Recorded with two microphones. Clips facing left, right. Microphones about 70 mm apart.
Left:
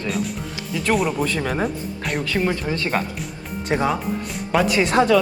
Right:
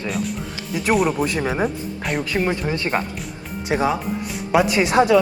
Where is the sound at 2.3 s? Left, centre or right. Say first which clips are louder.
Even; centre.